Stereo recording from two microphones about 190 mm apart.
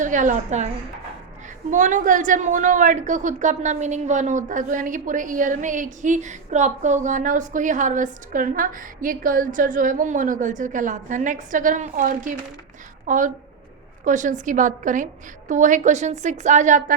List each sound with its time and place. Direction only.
0.0 s a woman's voice: 40° right (ahead or behind)
1.7 s a woman's voice: 40° right (ahead or behind)